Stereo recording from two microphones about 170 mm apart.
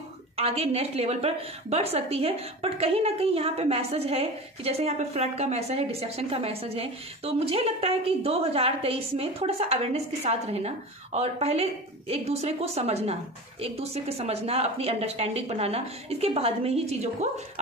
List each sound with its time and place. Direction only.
0.4 s a woman's voice: 35° right (ahead or behind)